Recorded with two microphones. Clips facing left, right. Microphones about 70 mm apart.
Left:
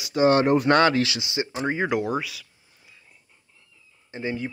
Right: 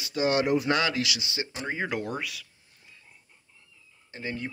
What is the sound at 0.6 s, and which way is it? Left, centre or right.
Speech, left.